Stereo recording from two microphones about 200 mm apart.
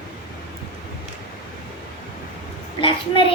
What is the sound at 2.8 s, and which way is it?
Speech, 25° left (ahead or behind).